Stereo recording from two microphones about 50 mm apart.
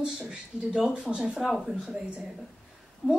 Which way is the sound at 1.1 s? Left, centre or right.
Centre.